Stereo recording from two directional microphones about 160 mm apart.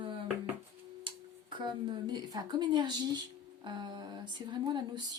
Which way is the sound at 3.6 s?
30° right (ahead or behind).